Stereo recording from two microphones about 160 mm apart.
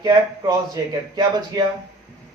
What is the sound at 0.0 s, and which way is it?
Speech, 25° right (ahead or behind).